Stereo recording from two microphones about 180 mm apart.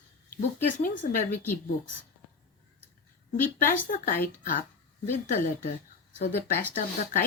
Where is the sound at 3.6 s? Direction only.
50° left (ahead or behind).